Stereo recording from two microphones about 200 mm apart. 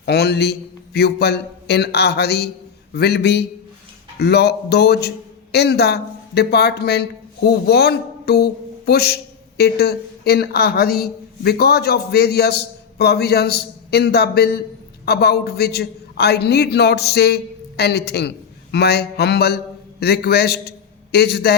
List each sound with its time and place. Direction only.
0.0 s a man's voice: 55° left (ahead or behind)